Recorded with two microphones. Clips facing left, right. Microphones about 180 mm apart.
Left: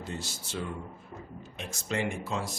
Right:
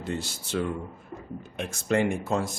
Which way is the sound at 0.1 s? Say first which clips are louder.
Right 9 dB; 65° right (ahead or behind).